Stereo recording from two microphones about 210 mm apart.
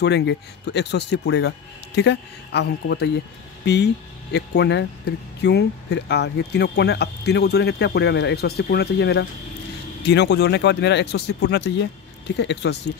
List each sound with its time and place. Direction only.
0.0 s speech: 55° left (ahead or behind)